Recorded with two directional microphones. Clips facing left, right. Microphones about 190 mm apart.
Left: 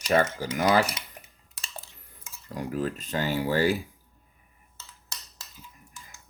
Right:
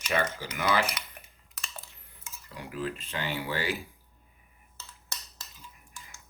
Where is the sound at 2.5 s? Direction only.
45° left (ahead or behind).